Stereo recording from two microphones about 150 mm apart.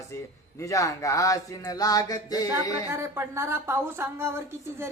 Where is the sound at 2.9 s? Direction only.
20° right (ahead or behind).